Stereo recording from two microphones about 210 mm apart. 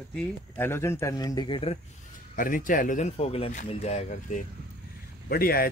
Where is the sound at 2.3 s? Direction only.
40° left (ahead or behind).